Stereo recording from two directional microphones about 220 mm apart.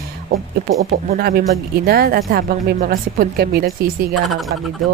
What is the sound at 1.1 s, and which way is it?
Speech, 45° right (ahead or behind).